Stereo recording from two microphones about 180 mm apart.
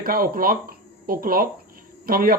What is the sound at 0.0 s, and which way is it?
Speech, 55° right (ahead or behind).